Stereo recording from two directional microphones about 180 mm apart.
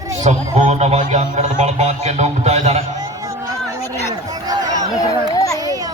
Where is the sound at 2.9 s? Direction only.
20° right (ahead or behind).